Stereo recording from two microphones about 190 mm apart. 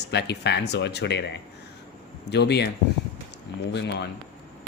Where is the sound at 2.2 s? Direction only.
60° left (ahead or behind).